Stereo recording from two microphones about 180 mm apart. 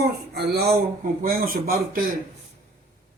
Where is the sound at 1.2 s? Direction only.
55° right (ahead or behind).